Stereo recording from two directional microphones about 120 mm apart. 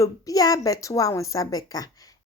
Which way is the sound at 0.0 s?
30° left (ahead or behind).